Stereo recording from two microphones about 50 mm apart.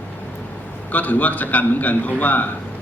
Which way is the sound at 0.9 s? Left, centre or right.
Left.